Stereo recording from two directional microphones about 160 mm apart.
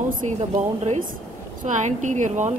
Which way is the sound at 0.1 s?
45° right (ahead or behind).